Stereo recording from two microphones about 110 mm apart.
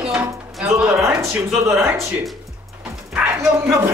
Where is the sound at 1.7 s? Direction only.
25° right (ahead or behind).